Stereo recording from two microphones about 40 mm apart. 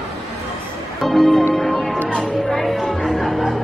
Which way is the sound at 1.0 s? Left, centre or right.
Centre.